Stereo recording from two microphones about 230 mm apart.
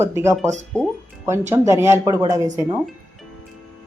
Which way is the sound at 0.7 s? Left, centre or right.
Centre.